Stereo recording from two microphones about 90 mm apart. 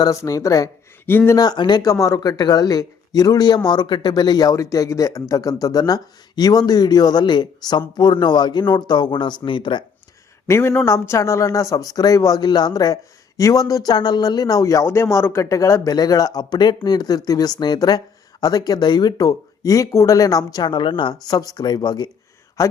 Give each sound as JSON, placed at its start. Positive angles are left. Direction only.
{"t": 0.0, "sound": "speech", "side_deg": 35}
{"t": 1.0, "sound": "speech", "side_deg": 25}
{"t": 1.4, "sound": "speech", "side_deg": 55}
{"t": 1.9, "sound": "speech", "side_deg": 40}
{"t": 10.4, "sound": "speech", "side_deg": 30}
{"t": 21.2, "sound": "speech", "side_deg": 45}